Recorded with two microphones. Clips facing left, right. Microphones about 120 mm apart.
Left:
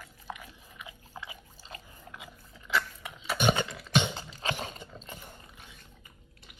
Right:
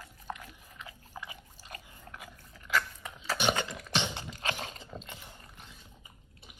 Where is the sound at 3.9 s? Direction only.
45° left (ahead or behind).